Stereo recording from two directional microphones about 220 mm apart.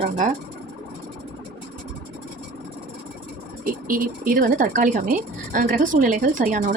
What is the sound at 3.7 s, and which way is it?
Speech, 40° right (ahead or behind).